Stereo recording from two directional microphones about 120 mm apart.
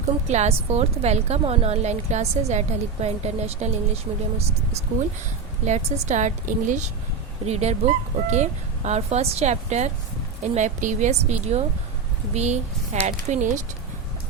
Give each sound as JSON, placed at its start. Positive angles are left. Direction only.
{"t": 0.3, "sound": "a woman's voice", "side_deg": -65}
{"t": 5.6, "sound": "a woman's voice", "side_deg": -75}
{"t": 7.4, "sound": "speech", "side_deg": -65}
{"t": 13.1, "sound": "a woman's voice", "side_deg": -80}